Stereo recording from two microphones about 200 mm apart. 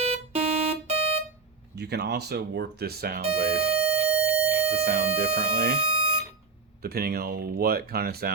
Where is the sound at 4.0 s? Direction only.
5° right (ahead or behind).